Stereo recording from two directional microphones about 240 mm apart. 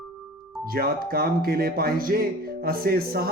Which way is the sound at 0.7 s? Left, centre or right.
Right.